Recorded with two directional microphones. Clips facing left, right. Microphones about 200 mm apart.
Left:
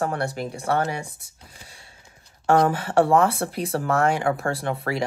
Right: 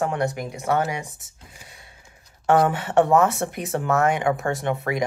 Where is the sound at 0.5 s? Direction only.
30° left (ahead or behind).